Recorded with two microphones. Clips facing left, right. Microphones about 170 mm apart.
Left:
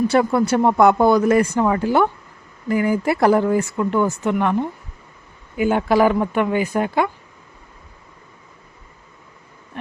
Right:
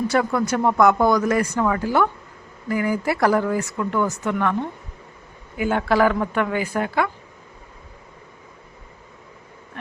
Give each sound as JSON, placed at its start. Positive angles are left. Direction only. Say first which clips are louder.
{"t": 0.1, "sound": "speech", "louder": "left 4 dB", "side_deg": 25}